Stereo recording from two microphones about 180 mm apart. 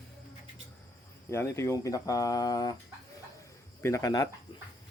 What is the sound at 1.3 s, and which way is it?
Speech, 15° left (ahead or behind).